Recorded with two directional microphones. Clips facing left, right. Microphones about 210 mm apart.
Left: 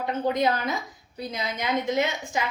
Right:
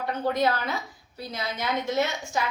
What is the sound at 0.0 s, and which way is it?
A woman's voice, 20° left (ahead or behind).